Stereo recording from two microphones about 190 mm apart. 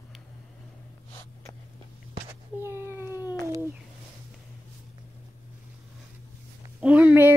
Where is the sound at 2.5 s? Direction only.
10° right (ahead or behind).